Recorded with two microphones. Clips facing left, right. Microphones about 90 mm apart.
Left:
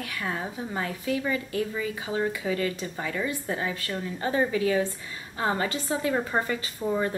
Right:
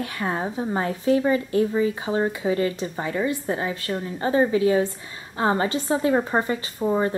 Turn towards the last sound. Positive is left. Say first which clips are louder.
# right 5 dB
turn(degrees=-25)  # may be behind; listen again after turning